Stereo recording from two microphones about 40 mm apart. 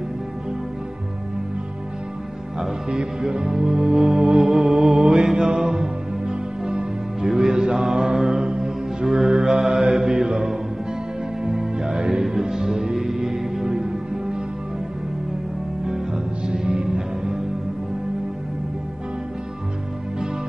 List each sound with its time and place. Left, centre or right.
2.6 s music: centre
15.8 s music: centre